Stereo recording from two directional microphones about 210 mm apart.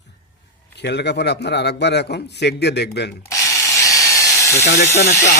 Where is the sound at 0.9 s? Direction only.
55° left (ahead or behind).